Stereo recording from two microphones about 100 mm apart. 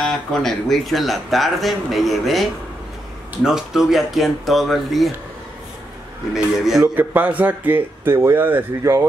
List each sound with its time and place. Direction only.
0.0 s speech: centre (ahead or behind)
6.3 s speech: 5° right (ahead or behind)
7.0 s speech: 15° right (ahead or behind)